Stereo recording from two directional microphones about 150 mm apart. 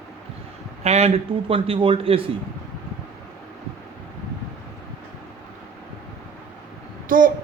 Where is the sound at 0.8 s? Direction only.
45° right (ahead or behind).